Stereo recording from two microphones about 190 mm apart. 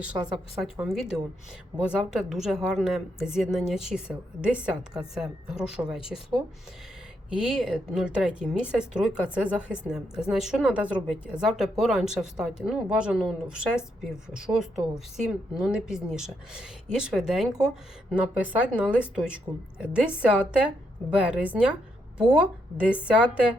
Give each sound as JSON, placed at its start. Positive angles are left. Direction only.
{"t": 0.3, "sound": "a woman's voice", "side_deg": 0}
{"t": 7.3, "sound": "a woman's voice", "side_deg": -5}